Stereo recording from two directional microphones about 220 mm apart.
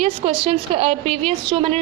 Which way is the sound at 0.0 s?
25° right (ahead or behind).